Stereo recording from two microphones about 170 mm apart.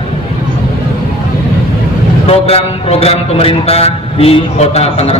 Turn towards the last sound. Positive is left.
turn(degrees=35)  # may be behind; listen again after turning